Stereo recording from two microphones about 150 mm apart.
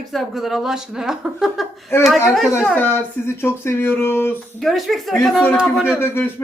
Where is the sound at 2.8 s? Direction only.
15° left (ahead or behind).